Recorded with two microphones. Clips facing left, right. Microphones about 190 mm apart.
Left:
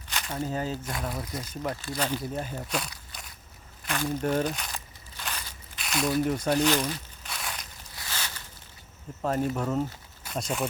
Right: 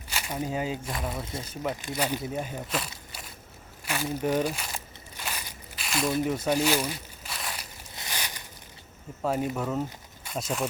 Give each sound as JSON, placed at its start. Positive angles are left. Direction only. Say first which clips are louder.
{"t": 0.1, "sound": "speech", "louder": "even", "side_deg": -10}
{"t": 1.2, "sound": "speech", "louder": "even", "side_deg": -25}
{"t": 1.7, "sound": "speech", "louder": "even", "side_deg": -15}
{"t": 4.7, "sound": "a sound", "louder": "right 2 dB", "side_deg": -10}
{"t": 6.2, "sound": "crumpling", "louder": "left 1 dB", "side_deg": -5}
{"t": 7.9, "sound": "a sound", "louder": "right 1 dB", "side_deg": -15}
{"t": 9.2, "sound": "speech", "louder": "left 1 dB", "side_deg": -10}